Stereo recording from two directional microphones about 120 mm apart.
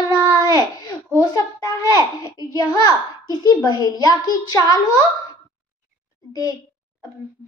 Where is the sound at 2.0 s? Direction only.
30° left (ahead or behind).